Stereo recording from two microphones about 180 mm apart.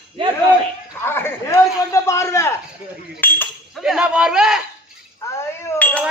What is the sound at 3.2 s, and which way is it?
Chink, 10° left (ahead or behind).